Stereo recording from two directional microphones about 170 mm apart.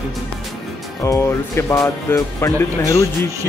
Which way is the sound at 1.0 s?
15° left (ahead or behind).